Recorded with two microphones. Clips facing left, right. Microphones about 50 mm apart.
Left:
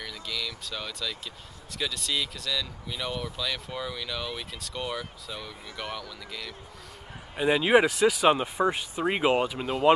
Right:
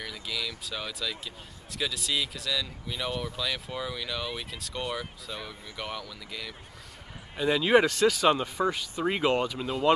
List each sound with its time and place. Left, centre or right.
0.0 s vehicle: centre
1.7 s speech: centre
7.3 s speech: centre